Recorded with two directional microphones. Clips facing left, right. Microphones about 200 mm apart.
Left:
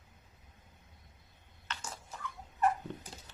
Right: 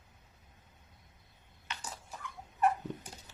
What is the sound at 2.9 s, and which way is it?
Dog, 15° right (ahead or behind).